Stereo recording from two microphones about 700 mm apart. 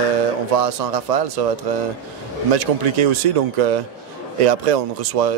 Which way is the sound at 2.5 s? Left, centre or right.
Right.